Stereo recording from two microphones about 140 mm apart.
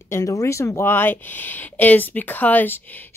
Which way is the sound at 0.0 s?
20° left (ahead or behind).